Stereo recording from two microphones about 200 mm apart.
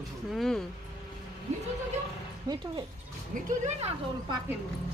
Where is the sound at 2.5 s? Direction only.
20° right (ahead or behind).